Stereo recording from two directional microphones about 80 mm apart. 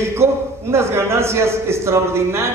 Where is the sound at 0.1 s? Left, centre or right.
Right.